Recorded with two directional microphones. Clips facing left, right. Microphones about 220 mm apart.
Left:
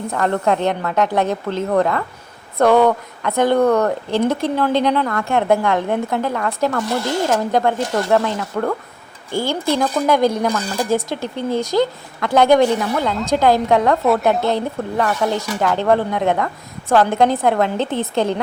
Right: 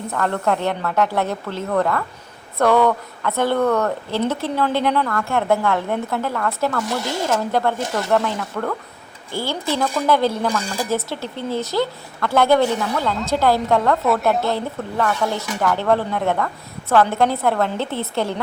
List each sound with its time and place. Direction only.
0.1 s speech: 15° left (ahead or behind)
14.0 s a woman's voice: centre (ahead or behind)
14.4 s speech: 20° left (ahead or behind)